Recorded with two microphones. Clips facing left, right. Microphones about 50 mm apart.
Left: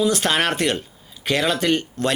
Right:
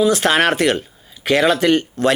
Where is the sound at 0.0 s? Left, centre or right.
Right.